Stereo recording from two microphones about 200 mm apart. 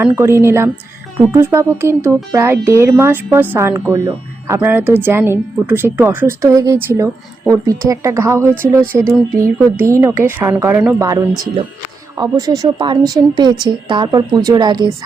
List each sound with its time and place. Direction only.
0.0 s a woman's voice: 10° right (ahead or behind)